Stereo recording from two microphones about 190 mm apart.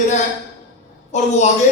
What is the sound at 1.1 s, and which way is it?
Speech, 40° left (ahead or behind).